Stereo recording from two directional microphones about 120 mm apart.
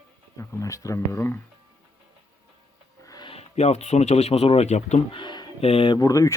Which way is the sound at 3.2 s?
60° left (ahead or behind).